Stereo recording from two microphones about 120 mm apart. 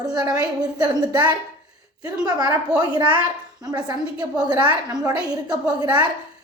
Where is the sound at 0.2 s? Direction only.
35° right (ahead or behind).